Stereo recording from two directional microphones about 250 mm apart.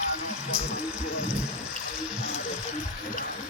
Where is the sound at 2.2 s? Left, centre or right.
Left.